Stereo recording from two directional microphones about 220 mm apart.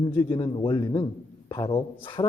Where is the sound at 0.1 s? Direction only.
15° left (ahead or behind).